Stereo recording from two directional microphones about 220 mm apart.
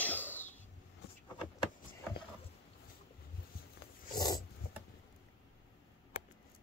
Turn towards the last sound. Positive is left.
turn(degrees=45)  # may be behind; listen again after turning